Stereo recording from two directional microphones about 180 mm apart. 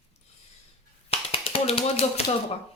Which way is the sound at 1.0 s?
30° left (ahead or behind).